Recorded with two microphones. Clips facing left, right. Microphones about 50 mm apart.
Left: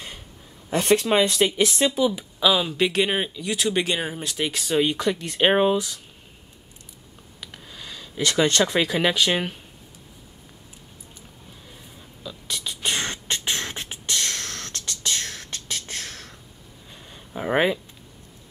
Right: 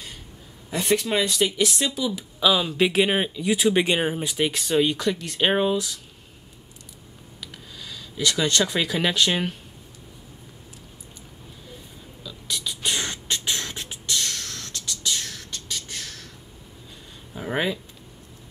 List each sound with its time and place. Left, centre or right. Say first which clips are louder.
1.0 s speech: left 4 dB; left
1.7 s speech: left 5 dB; centre
2.4 s speech: even; centre
7.3 s a sound: even; centre
8.2 s speech: left 2 dB; left
8.7 s speech: left 2 dB; centre
12.2 s beatboxing: even; centre
14.0 s a sound: left 1 dB; left
17.3 s a sound: left 4 dB; left